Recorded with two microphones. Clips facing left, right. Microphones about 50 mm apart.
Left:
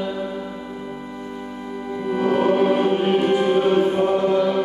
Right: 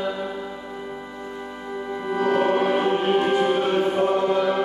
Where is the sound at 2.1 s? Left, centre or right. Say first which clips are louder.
Left 2 dB; centre.